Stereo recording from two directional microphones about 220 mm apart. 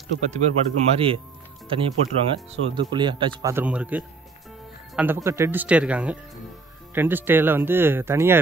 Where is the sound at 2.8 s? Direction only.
20° right (ahead or behind).